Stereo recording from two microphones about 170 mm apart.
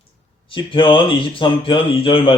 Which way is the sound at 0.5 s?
30° left (ahead or behind).